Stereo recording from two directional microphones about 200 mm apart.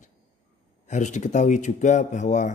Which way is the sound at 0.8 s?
35° left (ahead or behind).